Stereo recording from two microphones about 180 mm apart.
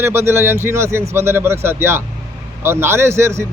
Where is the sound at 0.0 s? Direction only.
15° right (ahead or behind).